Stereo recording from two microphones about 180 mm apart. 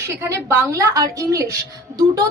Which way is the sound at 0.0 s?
15° right (ahead or behind).